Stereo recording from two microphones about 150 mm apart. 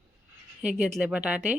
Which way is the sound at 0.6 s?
5° right (ahead or behind).